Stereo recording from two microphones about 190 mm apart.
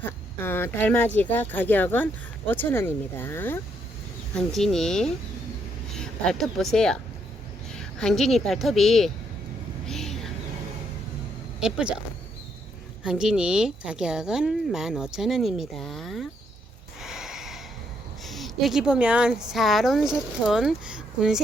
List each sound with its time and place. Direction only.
0.0 s a woman's voice: 10° left (ahead or behind)
9.8 s a sound: centre (ahead or behind)
11.6 s a woman's voice: 5° right (ahead or behind)
13.0 s a woman's voice: 5° right (ahead or behind)
17.0 s snort: 5° right (ahead or behind)
18.2 s a woman's voice: centre (ahead or behind)